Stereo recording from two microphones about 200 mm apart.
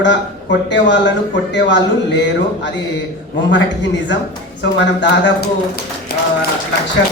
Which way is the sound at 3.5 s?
65° left (ahead or behind).